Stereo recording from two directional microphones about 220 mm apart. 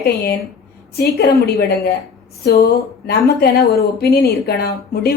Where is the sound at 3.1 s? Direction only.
45° left (ahead or behind).